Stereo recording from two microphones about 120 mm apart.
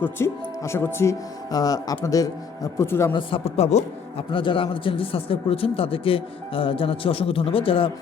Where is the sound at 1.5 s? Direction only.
30° left (ahead or behind).